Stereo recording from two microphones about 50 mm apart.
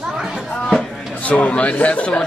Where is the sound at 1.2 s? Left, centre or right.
Left.